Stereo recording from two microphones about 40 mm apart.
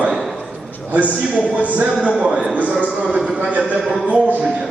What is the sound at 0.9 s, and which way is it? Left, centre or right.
A man's voice, right.